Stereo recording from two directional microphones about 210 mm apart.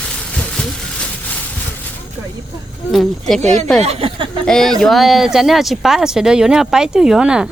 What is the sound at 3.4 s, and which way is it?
Speech, 35° right (ahead or behind).